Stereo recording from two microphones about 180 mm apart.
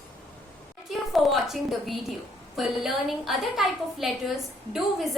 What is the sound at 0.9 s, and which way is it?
A woman's voice, centre (ahead or behind).